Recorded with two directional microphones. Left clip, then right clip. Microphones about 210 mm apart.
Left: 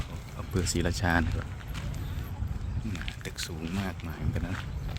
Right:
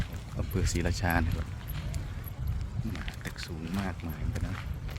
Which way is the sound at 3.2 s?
15° left (ahead or behind).